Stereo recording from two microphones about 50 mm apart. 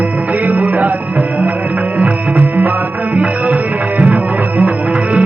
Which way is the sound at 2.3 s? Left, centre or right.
Right.